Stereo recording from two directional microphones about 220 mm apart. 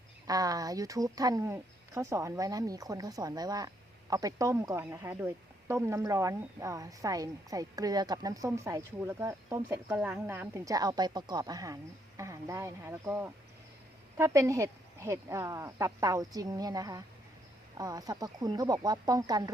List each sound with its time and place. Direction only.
0.3 s speech: 15° right (ahead or behind)